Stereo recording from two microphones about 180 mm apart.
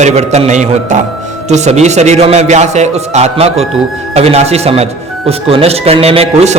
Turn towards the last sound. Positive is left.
turn(degrees=-35)  # may be behind; listen again after turning